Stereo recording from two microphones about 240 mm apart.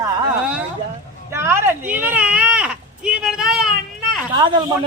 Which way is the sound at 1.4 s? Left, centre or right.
Centre.